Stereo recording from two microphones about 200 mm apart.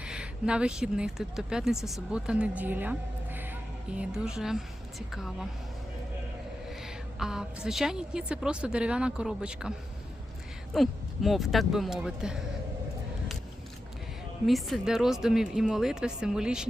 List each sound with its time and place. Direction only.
0.0 s speech: 5° right (ahead or behind)
6.7 s a woman's voice: centre (ahead or behind)
10.8 s a woman's voice: centre (ahead or behind)
14.4 s a woman's voice: centre (ahead or behind)